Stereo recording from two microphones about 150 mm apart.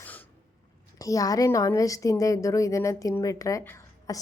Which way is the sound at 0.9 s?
25° left (ahead or behind).